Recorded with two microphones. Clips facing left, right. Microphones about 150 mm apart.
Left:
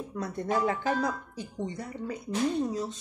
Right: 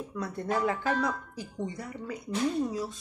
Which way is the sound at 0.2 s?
50° left (ahead or behind).